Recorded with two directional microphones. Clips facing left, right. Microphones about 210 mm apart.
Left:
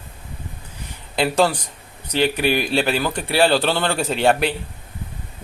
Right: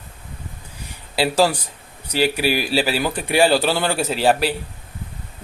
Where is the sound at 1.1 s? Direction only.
5° right (ahead or behind).